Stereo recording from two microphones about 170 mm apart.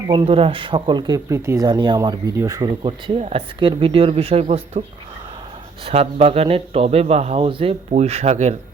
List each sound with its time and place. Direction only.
0.1 s speech: 30° right (ahead or behind)
5.8 s speech: 35° right (ahead or behind)